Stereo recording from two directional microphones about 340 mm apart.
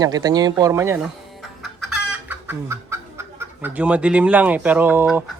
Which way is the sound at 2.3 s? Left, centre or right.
Centre.